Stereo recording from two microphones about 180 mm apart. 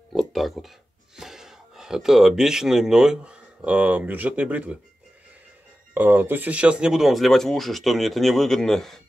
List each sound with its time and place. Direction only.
0.1 s speech: centre (ahead or behind)
5.9 s speech: 10° right (ahead or behind)